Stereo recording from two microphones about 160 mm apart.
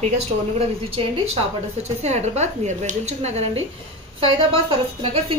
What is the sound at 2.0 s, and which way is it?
A woman's voice, 45° right (ahead or behind).